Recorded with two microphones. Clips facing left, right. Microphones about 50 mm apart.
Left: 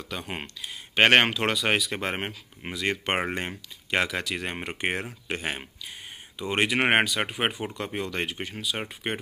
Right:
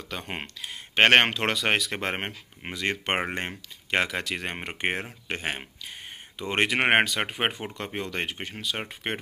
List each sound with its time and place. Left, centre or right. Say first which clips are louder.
0.9 s speech: even; right
6.3 s speech: even; right